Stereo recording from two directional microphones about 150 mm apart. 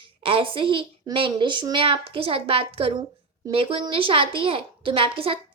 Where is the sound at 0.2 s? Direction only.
35° right (ahead or behind).